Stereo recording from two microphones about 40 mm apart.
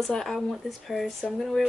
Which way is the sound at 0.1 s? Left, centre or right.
Centre.